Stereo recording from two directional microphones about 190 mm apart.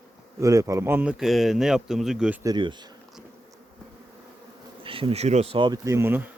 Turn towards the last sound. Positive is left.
turn(degrees=-10)  # may be behind; listen again after turning